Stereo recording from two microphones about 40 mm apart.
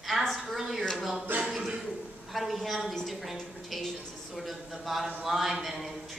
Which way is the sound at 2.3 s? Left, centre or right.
Centre.